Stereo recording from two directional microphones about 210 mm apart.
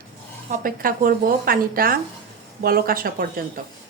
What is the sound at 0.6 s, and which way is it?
A woman's voice, 45° right (ahead or behind).